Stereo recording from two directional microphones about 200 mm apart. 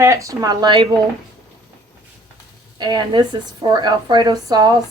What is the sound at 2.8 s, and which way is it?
A woman's voice, 20° right (ahead or behind).